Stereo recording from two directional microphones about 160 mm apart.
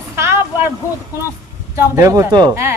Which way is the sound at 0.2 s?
15° right (ahead or behind).